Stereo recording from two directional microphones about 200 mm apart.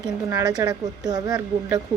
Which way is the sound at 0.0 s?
20° right (ahead or behind).